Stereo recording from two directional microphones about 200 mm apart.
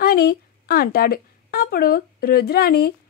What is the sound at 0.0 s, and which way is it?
A woman's voice, 50° left (ahead or behind).